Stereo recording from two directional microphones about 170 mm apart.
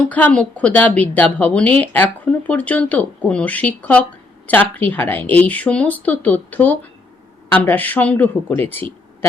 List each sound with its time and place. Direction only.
0.1 s speech: 10° left (ahead or behind)